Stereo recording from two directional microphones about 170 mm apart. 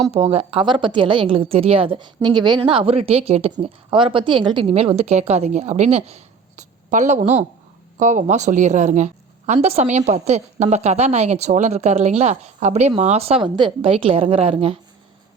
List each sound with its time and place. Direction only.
0.1 s a woman's voice: 35° right (ahead or behind)